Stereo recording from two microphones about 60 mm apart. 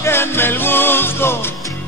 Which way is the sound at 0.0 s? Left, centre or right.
Left.